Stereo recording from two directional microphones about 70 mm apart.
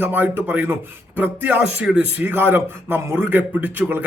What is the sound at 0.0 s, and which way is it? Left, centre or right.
Speech, right.